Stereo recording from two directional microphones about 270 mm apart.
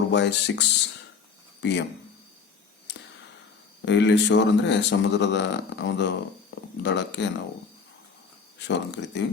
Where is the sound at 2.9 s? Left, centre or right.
Left.